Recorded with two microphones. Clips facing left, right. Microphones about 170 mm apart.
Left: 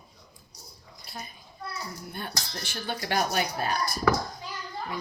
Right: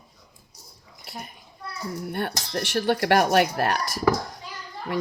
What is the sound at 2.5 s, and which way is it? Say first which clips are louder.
Speech: right 11 dB; 75° right (ahead or behind).